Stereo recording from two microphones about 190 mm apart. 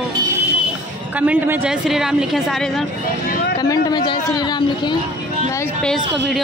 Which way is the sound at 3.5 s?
20° left (ahead or behind).